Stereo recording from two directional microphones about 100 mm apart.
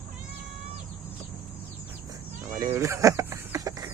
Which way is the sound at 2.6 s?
30° right (ahead or behind).